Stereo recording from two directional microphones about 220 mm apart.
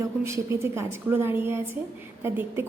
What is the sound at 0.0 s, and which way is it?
A woman's voice, 10° right (ahead or behind).